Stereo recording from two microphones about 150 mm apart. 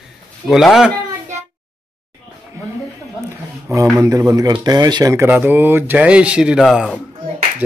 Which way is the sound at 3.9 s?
25° right (ahead or behind).